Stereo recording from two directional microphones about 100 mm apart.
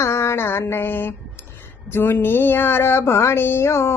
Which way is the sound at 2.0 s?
20° left (ahead or behind).